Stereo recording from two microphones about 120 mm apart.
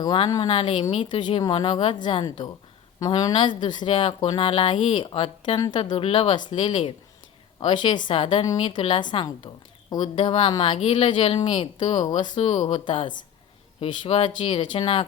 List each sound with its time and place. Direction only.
0.0 s speech: 40° left (ahead or behind)
3.1 s speech: 35° left (ahead or behind)
5.5 s a woman's voice: 30° left (ahead or behind)
5.8 s speech: 50° left (ahead or behind)